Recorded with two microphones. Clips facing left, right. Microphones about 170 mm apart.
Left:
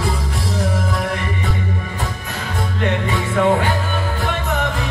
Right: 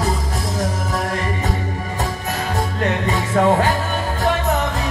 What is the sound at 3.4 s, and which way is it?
Music, 40° right (ahead or behind).